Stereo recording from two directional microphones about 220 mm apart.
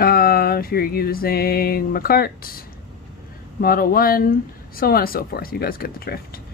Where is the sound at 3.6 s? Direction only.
40° left (ahead or behind).